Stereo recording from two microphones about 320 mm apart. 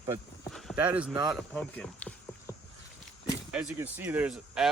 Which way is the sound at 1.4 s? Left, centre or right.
Centre.